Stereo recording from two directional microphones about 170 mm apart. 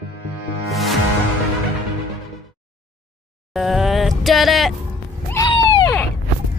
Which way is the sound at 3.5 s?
Centre (ahead or behind).